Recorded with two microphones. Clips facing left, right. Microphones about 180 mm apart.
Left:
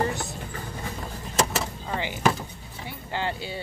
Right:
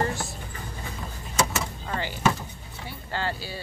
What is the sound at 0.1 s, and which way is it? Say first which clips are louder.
Music: left 1 dB; 20° left (ahead or behind).